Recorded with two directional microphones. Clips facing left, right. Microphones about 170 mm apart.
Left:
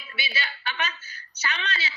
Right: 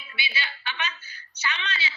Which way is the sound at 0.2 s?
40° left (ahead or behind).